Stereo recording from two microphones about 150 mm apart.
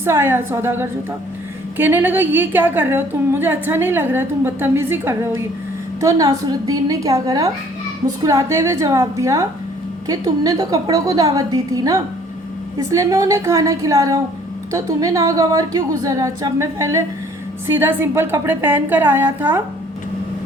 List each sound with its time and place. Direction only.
0.0 s a woman's voice: 15° right (ahead or behind)